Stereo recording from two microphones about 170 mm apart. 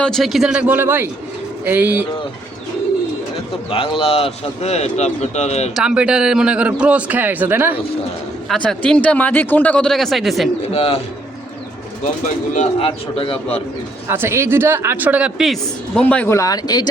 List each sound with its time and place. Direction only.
0.0 s a man's voice: centre (ahead or behind)
3.7 s speech: 35° left (ahead or behind)
5.7 s a man's voice: 5° right (ahead or behind)
8.4 s a man's voice: 5° left (ahead or behind)
10.7 s speech: 35° left (ahead or behind)
12.8 s speech: 30° left (ahead or behind)
14.1 s a man's voice: 15° right (ahead or behind)
16.0 s a man's voice: 10° left (ahead or behind); by 16.9 s 25° left (ahead or behind)